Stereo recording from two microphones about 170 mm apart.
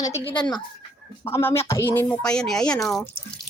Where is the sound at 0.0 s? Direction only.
25° left (ahead or behind).